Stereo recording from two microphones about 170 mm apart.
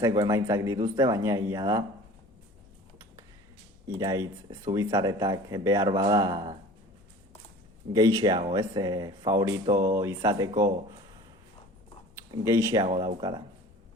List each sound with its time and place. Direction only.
0.2 s speech: 20° right (ahead or behind)
3.8 s speech: 20° right (ahead or behind)
7.9 s speech: 20° right (ahead or behind)
12.3 s speech: 15° right (ahead or behind)